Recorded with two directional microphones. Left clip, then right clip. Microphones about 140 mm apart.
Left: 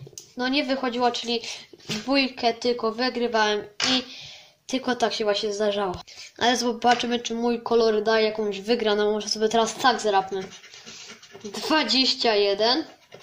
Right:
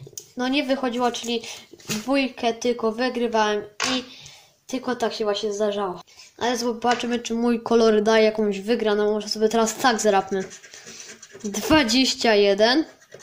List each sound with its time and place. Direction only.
0.4 s a woman's voice: 20° right (ahead or behind)
7.3 s speech: 30° right (ahead or behind)
7.6 s speech: 40° right (ahead or behind); by 8.7 s 25° right (ahead or behind)
8.7 s speech: 10° right (ahead or behind); by 10.4 s 35° right (ahead or behind)
11.5 s speech: 35° right (ahead or behind)